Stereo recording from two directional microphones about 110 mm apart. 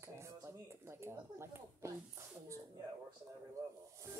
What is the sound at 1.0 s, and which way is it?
Speech, 25° right (ahead or behind).